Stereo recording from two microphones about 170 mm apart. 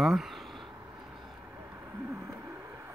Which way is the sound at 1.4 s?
15° right (ahead or behind).